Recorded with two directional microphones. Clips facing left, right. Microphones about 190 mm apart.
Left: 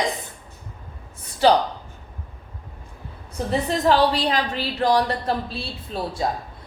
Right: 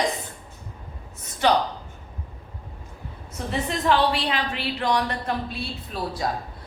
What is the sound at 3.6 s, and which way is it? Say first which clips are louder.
A woman's voice: left 2 dB; 35° left (ahead or behind).